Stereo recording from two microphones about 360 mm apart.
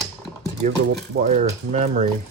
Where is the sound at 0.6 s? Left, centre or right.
Right.